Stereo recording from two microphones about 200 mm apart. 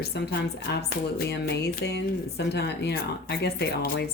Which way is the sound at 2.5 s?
55° left (ahead or behind).